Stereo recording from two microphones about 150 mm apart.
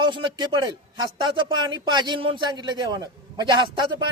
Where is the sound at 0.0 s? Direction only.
30° right (ahead or behind).